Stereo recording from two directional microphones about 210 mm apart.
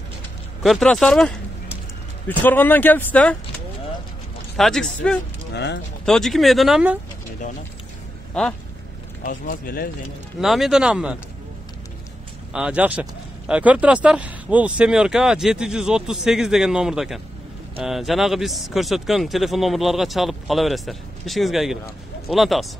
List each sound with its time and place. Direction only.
0.6 s speech: centre (ahead or behind)
5.5 s speech: 55° left (ahead or behind)
6.0 s speech: centre (ahead or behind)
8.3 s speech: 5° left (ahead or behind)
9.5 s speech: 45° left (ahead or behind)
10.4 s speech: centre (ahead or behind)
12.5 s speech: 5° right (ahead or behind)